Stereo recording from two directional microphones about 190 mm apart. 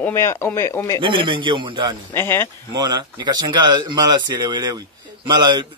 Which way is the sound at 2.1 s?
10° left (ahead or behind).